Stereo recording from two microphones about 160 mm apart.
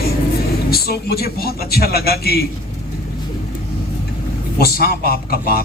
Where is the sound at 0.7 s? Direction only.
80° left.